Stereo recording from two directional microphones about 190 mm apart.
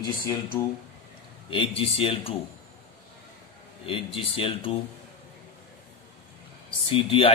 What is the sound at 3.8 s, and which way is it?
Speech, 30° left (ahead or behind).